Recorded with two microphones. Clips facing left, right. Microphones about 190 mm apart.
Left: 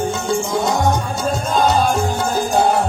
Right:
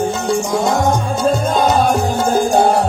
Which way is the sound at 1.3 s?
50° right (ahead or behind).